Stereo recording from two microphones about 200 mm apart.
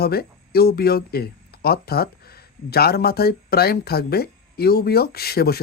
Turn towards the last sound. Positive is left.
turn(degrees=50)  # may be behind; listen again after turning